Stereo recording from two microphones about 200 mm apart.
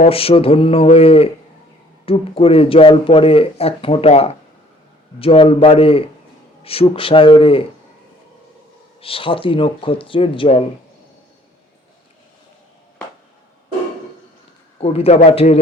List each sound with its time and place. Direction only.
0.0 s speech: 30° left (ahead or behind)
9.0 s speech: 25° left (ahead or behind)
14.8 s a man's voice: 30° left (ahead or behind)